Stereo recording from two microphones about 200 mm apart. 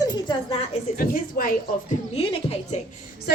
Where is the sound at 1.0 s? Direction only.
45° left (ahead or behind).